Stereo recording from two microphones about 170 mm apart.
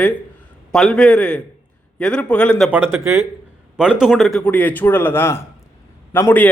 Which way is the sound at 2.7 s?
15° right (ahead or behind).